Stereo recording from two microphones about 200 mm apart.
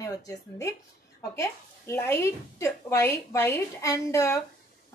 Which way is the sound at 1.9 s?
15° left (ahead or behind).